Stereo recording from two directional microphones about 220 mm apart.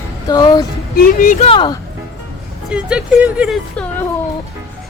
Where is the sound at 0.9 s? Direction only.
40° left (ahead or behind); by 1.8 s 25° left (ahead or behind).